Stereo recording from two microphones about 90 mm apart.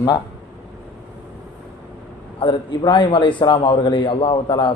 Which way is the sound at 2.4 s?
65° left (ahead or behind).